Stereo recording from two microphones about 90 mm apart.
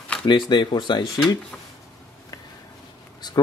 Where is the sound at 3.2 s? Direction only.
50° left (ahead or behind).